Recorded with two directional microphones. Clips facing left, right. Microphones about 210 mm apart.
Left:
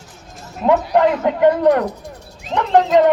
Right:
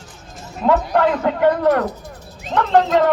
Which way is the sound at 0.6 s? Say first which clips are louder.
Left 2 dB; 15° left (ahead or behind).